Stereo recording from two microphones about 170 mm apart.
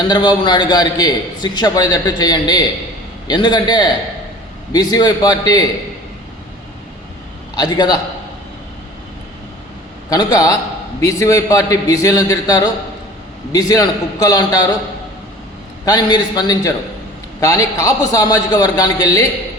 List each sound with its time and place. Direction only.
0.1 s a man's voice: 25° left (ahead or behind)
7.5 s a man's voice: 25° left (ahead or behind)
10.1 s a man's voice: 20° left (ahead or behind)
15.8 s a man's voice: 25° left (ahead or behind)